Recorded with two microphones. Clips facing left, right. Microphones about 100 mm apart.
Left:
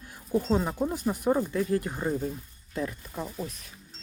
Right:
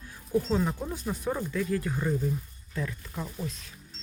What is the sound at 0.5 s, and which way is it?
Speech, 15° left (ahead or behind).